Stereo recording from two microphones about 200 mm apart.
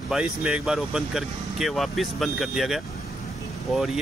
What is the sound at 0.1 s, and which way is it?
Speech, 5° right (ahead or behind).